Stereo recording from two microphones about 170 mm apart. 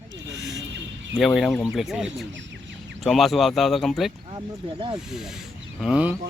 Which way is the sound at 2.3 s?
90° right.